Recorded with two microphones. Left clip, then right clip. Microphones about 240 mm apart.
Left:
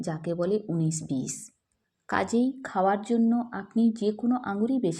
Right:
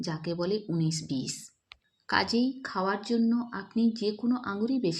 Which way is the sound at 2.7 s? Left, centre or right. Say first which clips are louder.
Left 5 dB; centre.